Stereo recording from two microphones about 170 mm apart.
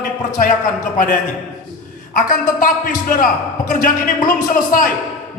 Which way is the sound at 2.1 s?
55° left (ahead or behind).